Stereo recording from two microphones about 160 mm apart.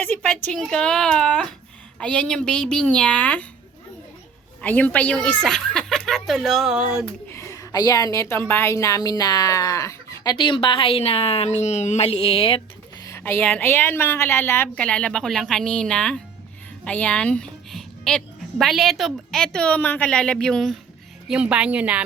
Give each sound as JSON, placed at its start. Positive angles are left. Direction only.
{"t": 0.0, "sound": "a woman's voice", "side_deg": 10}
{"t": 4.6, "sound": "a woman's voice", "side_deg": 10}
{"t": 7.3, "sound": "a woman's voice", "side_deg": 20}
{"t": 10.3, "sound": "a woman's voice", "side_deg": 30}
{"t": 13.1, "sound": "a woman's voice", "side_deg": 15}
{"t": 16.8, "sound": "a sound", "side_deg": 5}
{"t": 18.6, "sound": "a woman's voice", "side_deg": 0}